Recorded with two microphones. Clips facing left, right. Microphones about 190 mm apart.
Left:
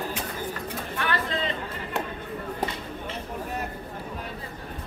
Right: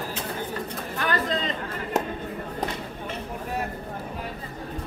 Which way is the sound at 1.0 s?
40° right (ahead or behind).